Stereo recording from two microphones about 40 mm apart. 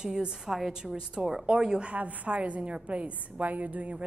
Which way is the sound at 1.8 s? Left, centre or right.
Right.